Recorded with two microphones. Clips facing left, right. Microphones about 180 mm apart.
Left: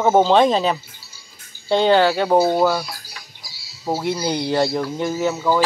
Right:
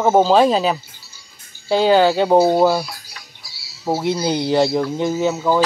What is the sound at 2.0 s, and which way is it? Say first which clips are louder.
Speech: right 3 dB; 20° right (ahead or behind).